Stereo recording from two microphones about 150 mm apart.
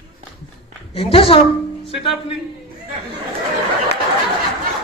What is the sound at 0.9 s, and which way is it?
Speech, 40° left (ahead or behind).